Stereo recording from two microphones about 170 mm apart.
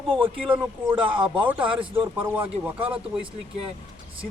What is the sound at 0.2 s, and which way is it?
A man's voice, 30° right (ahead or behind).